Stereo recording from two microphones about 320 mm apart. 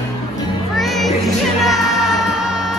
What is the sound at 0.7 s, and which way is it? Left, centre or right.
Music, centre.